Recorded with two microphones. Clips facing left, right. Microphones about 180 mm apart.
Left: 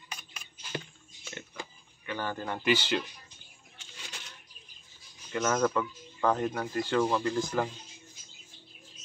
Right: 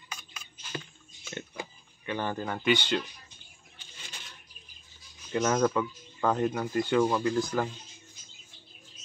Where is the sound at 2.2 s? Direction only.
20° right (ahead or behind).